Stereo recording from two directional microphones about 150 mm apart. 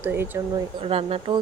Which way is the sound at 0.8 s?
40° right (ahead or behind).